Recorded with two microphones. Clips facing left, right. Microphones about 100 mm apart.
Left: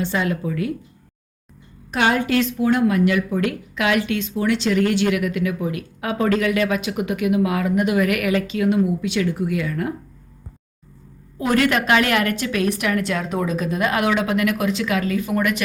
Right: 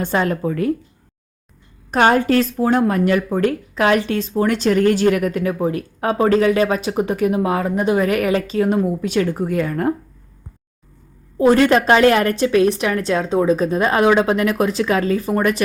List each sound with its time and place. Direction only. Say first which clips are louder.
0.0 s a woman's voice: right 3 dB; 45° right (ahead or behind)
1.9 s speech: right 5 dB; 40° right (ahead or behind)
11.3 s speech: right 6 dB; 30° right (ahead or behind)